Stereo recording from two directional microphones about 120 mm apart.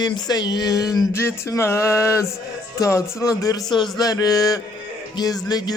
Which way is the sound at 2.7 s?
30° left (ahead or behind).